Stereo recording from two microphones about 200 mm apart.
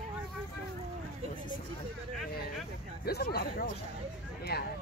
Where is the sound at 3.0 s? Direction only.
50° left (ahead or behind).